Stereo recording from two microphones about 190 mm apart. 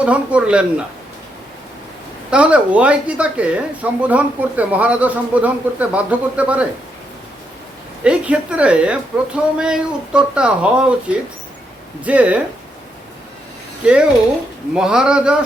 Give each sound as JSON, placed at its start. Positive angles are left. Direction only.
{"t": 0.0, "sound": "speech", "side_deg": -5}
{"t": 2.3, "sound": "speech", "side_deg": -5}
{"t": 8.0, "sound": "speech", "side_deg": -5}
{"t": 12.0, "sound": "speech", "side_deg": -5}
{"t": 13.8, "sound": "speech", "side_deg": -5}